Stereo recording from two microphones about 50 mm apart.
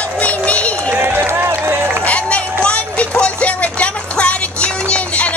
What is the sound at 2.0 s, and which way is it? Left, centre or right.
Run, left.